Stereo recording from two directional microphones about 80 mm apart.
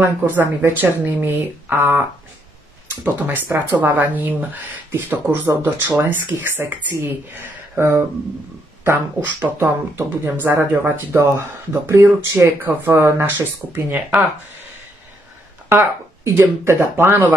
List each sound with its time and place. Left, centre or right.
0.0 s speech: right
3.5 s speech: right
5.9 s speech: right
15.7 s speech: right